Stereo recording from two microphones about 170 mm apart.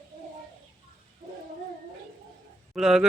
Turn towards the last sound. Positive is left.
turn(degrees=0)  # may be behind; listen again after turning